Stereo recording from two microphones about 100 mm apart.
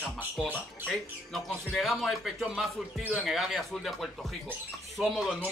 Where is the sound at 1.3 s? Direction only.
Centre (ahead or behind).